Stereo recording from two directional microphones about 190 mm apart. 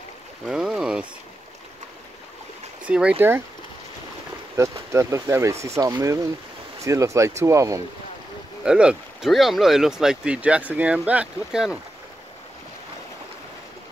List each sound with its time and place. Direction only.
0.5 s boat: 5° right (ahead or behind)
2.9 s speech: 5° right (ahead or behind)
4.9 s speech: 15° right (ahead or behind)
8.6 s speech: 5° right (ahead or behind)